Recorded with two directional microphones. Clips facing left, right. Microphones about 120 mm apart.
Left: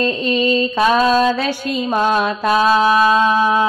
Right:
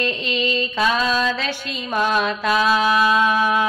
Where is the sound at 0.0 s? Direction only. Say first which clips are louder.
Left 6 dB; 40° left (ahead or behind).